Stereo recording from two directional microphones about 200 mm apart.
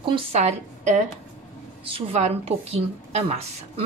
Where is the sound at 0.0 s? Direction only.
30° right (ahead or behind).